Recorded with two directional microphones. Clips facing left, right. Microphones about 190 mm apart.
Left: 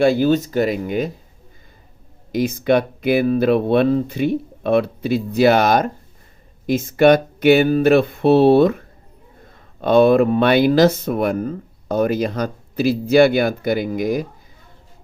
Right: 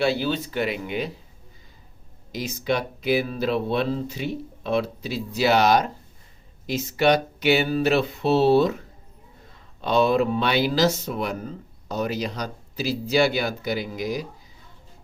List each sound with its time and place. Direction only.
0.0 s speech: 50° left (ahead or behind)
2.3 s speech: 55° left (ahead or behind)